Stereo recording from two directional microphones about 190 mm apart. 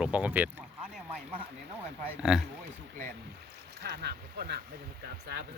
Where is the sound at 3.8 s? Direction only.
60° right (ahead or behind).